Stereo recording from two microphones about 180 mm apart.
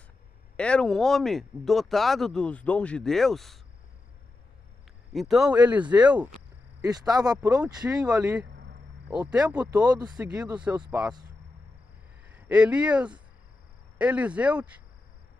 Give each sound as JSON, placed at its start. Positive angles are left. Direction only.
{"t": 0.6, "sound": "speech", "side_deg": 5}
{"t": 5.1, "sound": "speech", "side_deg": 0}
{"t": 6.8, "sound": "speech", "side_deg": -20}
{"t": 7.6, "sound": "speech", "side_deg": -5}
{"t": 9.8, "sound": "speech", "side_deg": -20}
{"t": 10.1, "sound": "speech", "side_deg": -5}
{"t": 12.4, "sound": "speech", "side_deg": -5}